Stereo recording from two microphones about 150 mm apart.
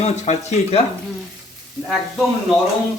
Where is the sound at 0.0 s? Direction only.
45° left (ahead or behind).